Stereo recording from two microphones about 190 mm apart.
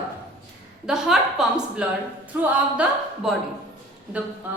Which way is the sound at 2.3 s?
5° right (ahead or behind).